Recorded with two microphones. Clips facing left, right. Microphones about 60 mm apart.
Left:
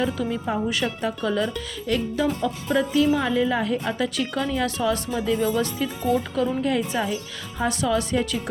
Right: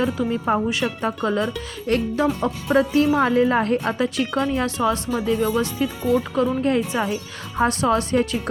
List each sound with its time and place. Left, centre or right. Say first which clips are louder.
0.0 s a woman's voice: right 3 dB; right
3.9 s speech: right 3 dB; right